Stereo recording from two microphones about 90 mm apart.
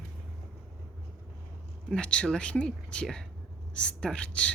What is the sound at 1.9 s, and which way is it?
Speech, 10° left (ahead or behind).